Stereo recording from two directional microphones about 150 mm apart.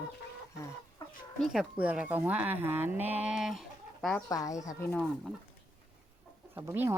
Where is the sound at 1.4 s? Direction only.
5° right (ahead or behind).